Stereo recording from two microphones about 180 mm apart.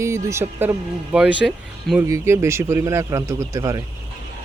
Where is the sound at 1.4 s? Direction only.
Centre (ahead or behind).